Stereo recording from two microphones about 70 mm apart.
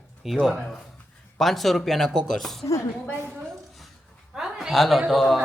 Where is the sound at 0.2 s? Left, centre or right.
Centre.